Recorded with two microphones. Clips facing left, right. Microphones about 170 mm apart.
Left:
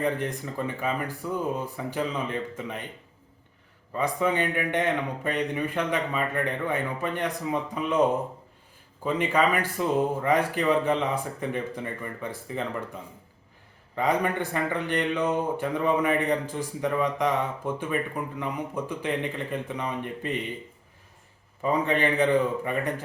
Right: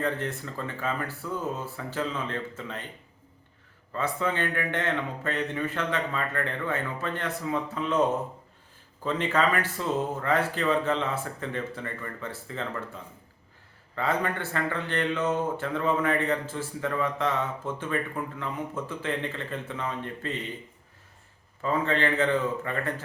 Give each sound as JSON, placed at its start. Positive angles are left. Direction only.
{"t": 0.0, "sound": "a man's voice", "side_deg": 15}
{"t": 3.9, "sound": "a man's voice", "side_deg": 15}
{"t": 9.0, "sound": "a man's voice", "side_deg": 10}
{"t": 21.6, "sound": "a man's voice", "side_deg": 15}